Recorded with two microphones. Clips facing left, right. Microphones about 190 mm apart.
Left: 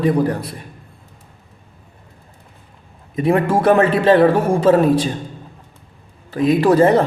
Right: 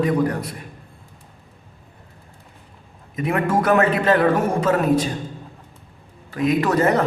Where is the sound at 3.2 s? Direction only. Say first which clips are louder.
Left 5 dB; 30° left (ahead or behind).